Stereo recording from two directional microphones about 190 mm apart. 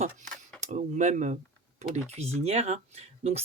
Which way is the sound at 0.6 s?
40° right (ahead or behind).